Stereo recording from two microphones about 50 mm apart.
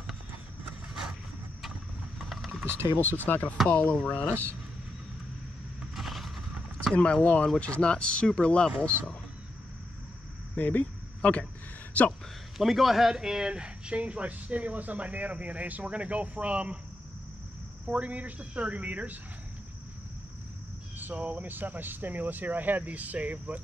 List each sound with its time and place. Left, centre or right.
2.2 s mechanisms: centre
3.0 s speech: left
3.6 s speech: left
4.1 s speech: left
5.9 s vehicle: centre
7.0 s speech: left
10.5 s speech: left
12.5 s a man's voice: centre; by 16.7 s right
17.8 s speech: right
21.0 s speech: right